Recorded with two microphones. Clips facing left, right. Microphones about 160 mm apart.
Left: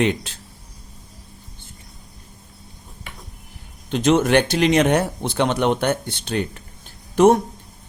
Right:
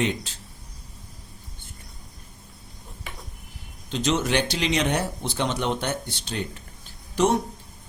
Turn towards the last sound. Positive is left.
turn(degrees=50)  # may be behind; listen again after turning